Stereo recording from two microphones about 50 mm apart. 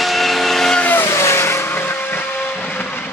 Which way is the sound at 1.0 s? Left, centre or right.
Left.